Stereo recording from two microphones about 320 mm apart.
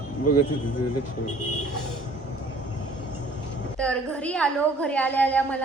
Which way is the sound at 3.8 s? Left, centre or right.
Centre.